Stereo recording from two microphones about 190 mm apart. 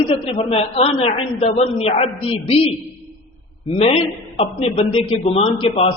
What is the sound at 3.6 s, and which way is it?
A man's voice, 30° left (ahead or behind).